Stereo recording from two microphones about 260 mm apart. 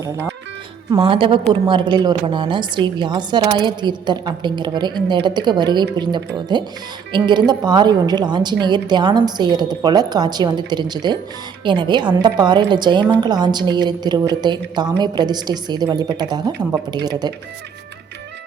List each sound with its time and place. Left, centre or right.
0.9 s a woman's voice: centre